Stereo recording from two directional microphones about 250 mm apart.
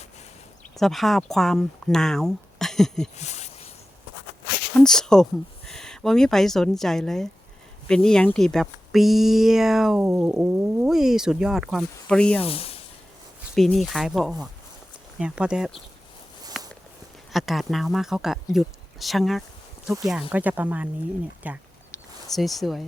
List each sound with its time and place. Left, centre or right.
0.8 s speech: centre
3.2 s a sound: left
4.8 s speech: centre
12.4 s speech: left
13.6 s speech: centre
16.5 s walk: centre
17.3 s speech: centre
21.4 s a sound: centre